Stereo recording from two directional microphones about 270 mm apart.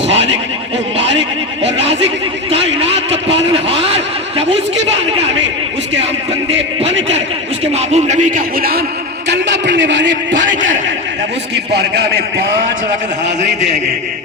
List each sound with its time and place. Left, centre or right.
1.8 s neigh: right
2.7 s vehicle: right
3.5 s a sound: right
7.6 s a sound: right
11.5 s a man's voice: right
13.4 s a man's voice: right